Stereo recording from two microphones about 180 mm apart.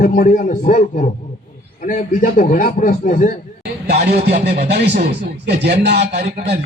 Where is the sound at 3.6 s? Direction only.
65° right (ahead or behind).